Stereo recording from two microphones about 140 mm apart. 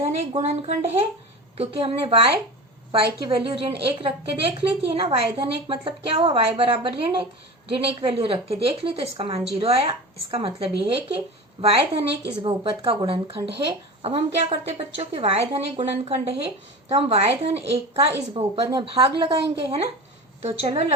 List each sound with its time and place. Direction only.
0.2 s a woman's voice: 50° right (ahead or behind)
3.3 s a woman's voice: 35° right (ahead or behind)